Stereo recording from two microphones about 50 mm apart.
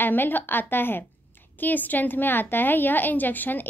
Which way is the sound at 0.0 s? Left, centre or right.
Left.